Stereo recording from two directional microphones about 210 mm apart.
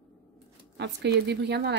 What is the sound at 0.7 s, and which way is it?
Speech, 55° right (ahead or behind).